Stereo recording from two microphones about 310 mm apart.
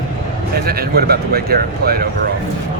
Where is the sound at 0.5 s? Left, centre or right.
Right.